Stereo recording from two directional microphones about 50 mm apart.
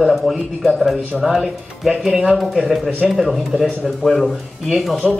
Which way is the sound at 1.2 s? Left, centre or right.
Centre.